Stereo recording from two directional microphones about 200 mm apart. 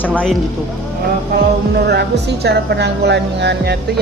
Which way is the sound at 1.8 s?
55° right (ahead or behind).